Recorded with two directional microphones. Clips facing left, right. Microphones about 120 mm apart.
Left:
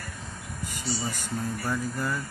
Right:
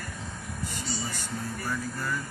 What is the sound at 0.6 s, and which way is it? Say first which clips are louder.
Speech: left 3 dB; 15° left (ahead or behind).